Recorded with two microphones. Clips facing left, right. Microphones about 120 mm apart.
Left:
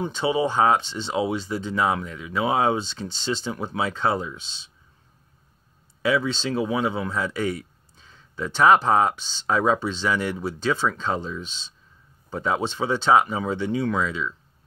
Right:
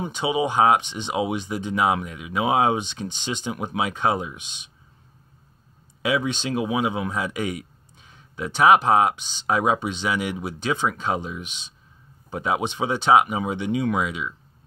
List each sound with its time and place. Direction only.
0.0 s speech: 15° right (ahead or behind)
6.0 s speech: 15° right (ahead or behind)